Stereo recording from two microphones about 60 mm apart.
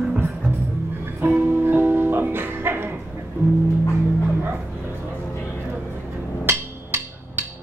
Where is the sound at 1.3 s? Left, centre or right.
Right.